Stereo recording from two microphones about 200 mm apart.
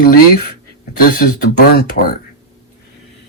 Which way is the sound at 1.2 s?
55° left (ahead or behind).